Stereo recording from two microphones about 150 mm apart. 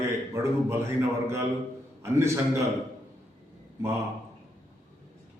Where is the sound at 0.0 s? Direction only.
20° right (ahead or behind).